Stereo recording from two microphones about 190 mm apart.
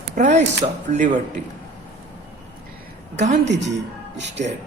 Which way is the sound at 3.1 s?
40° right (ahead or behind).